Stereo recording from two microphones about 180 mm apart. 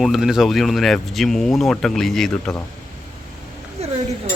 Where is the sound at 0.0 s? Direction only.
Centre (ahead or behind).